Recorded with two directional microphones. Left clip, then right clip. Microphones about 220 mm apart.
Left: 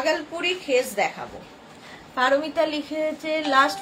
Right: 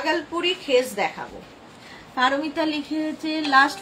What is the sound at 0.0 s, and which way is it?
A woman's voice, 15° left (ahead or behind).